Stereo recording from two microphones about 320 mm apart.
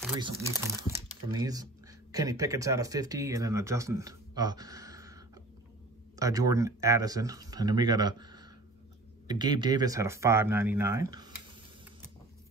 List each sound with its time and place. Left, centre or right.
0.7 s speech: centre